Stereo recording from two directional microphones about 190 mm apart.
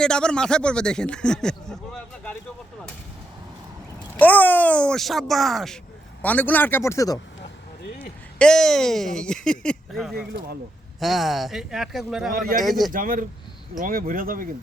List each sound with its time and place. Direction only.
0.0 s speech: 5° left (ahead or behind)
4.2 s speech: 10° left (ahead or behind)
8.4 s speech: 5° left (ahead or behind)
12.3 s speech: 50° right (ahead or behind)
12.5 s speech: centre (ahead or behind)
12.9 s speech: 45° right (ahead or behind)